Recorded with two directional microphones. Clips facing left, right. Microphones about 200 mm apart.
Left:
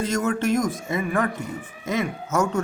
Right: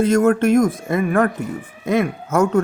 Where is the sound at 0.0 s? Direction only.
55° right (ahead or behind).